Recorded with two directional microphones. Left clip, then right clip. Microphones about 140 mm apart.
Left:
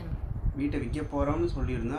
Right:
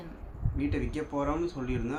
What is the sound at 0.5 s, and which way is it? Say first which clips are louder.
Speech: even; 10° right (ahead or behind).